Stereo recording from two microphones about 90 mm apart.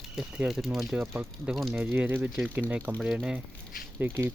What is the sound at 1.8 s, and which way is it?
Speech, 20° right (ahead or behind).